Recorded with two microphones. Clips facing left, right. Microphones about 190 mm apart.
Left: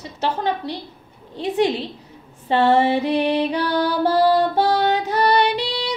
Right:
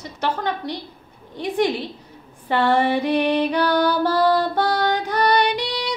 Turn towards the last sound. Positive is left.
turn(degrees=25)  # may be behind; listen again after turning